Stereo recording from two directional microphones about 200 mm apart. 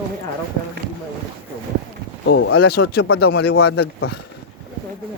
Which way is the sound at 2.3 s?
65° left (ahead or behind).